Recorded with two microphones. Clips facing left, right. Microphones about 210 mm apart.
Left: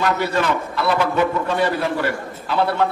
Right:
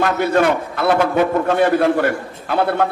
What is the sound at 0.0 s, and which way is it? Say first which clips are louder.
A man's voice: right 5 dB; 55° right (ahead or behind).